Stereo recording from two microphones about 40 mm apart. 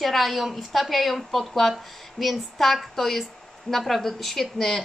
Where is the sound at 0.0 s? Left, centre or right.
Centre.